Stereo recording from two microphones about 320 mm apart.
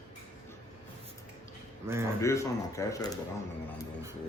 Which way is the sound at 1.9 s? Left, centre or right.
Centre.